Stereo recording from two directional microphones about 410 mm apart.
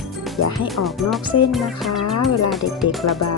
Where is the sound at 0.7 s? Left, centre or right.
Centre.